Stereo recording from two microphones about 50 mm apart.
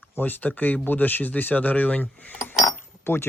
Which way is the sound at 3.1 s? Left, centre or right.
Left.